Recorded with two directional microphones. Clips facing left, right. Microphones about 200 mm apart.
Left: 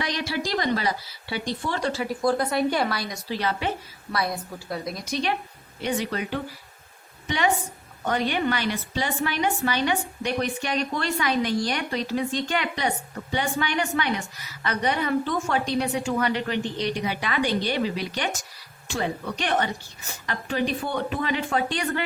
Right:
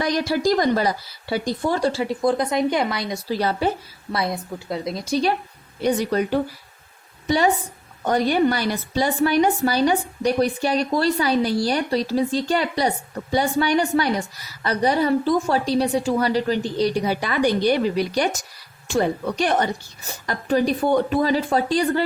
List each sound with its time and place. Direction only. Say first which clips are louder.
0.0 s a woman's voice: right 8 dB; 45° right (ahead or behind); by 3.2 s 20° right (ahead or behind)
3.2 s a woman's voice: right 5 dB; 40° right (ahead or behind)
4.1 s a woman's voice: right 3 dB; 25° right (ahead or behind)